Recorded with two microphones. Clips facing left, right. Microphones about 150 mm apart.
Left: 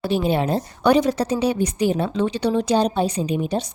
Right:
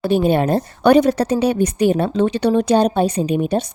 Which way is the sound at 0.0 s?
55° right (ahead or behind).